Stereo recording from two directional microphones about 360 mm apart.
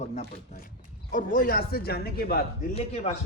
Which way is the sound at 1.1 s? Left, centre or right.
Left.